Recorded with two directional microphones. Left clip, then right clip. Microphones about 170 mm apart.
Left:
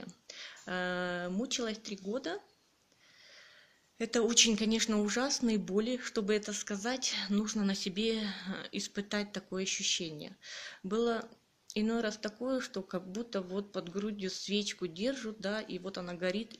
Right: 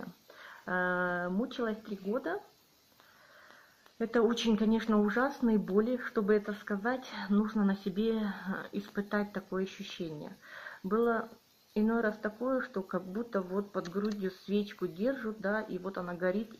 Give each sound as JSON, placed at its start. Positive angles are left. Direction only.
{"t": 0.7, "sound": "speech", "side_deg": 25}
{"t": 4.0, "sound": "speech", "side_deg": 25}